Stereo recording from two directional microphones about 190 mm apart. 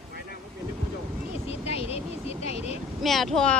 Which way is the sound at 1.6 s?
30° left (ahead or behind).